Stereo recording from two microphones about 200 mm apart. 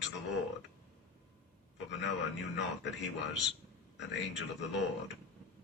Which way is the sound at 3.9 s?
60° left (ahead or behind).